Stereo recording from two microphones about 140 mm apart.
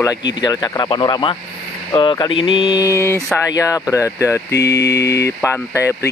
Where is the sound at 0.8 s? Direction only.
35° left (ahead or behind).